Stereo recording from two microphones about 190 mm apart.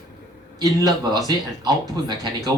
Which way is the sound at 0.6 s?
20° right (ahead or behind).